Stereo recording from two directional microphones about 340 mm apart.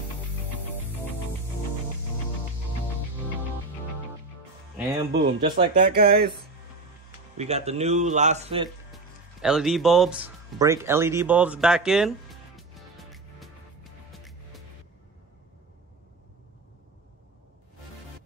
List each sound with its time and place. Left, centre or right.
5.1 s speech: right
8.9 s music: centre